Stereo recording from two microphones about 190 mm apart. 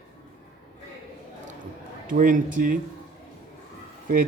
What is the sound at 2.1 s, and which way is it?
Speech, 45° right (ahead or behind).